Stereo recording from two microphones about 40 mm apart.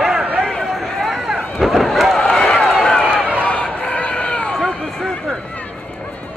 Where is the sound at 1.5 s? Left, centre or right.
Centre.